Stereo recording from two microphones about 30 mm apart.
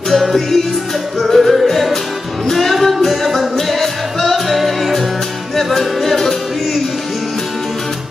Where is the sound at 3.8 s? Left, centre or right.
Centre.